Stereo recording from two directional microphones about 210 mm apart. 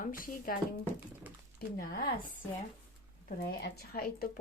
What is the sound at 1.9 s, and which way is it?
Speech, 45° left (ahead or behind).